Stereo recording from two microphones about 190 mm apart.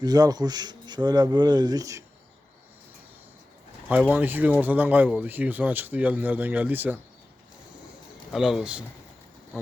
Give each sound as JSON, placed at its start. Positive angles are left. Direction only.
{"t": 0.0, "sound": "speech", "side_deg": -20}
{"t": 4.1, "sound": "speech", "side_deg": -10}
{"t": 8.3, "sound": "speech", "side_deg": 0}